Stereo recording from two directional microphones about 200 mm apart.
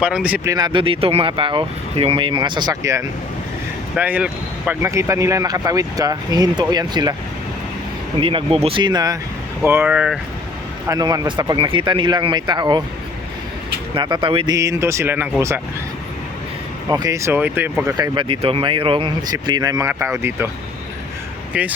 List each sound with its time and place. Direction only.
0.0 s speech: 5° right (ahead or behind)
0.5 s speech: 20° right (ahead or behind)
3.9 s speech: 5° right (ahead or behind)
8.2 s speech: 25° right (ahead or behind); by 10.2 s 5° right (ahead or behind)
10.8 s speech: 20° right (ahead or behind)
13.9 s speech: 25° right (ahead or behind)
16.9 s speech: 15° right (ahead or behind)